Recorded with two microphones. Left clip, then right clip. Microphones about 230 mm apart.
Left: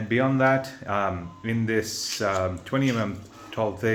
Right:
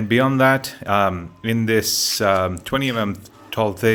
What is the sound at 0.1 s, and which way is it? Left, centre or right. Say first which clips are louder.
Speech: right 5 dB; right.